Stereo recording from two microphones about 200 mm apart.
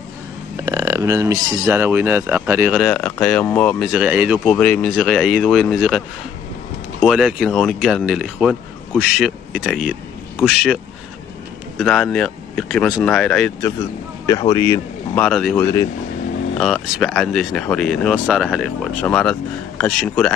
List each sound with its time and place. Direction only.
0.6 s speech: 15° right (ahead or behind)
2.8 s speech: 5° left (ahead or behind)
4.5 s speech: 5° left (ahead or behind)
14.5 s speech: 15° left (ahead or behind)
15.2 s speech: 5° left (ahead or behind)